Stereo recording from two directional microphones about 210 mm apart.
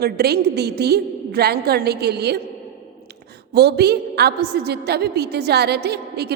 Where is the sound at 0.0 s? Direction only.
50° right (ahead or behind).